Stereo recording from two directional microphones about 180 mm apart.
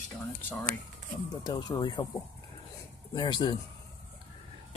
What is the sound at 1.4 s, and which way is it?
Speech, 20° left (ahead or behind).